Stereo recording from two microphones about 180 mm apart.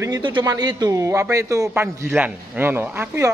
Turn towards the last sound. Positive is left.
turn(degrees=-10)  # may be behind; listen again after turning